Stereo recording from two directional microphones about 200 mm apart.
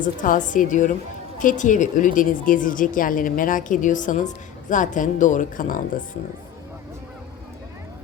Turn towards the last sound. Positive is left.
turn(degrees=40)  # may be behind; listen again after turning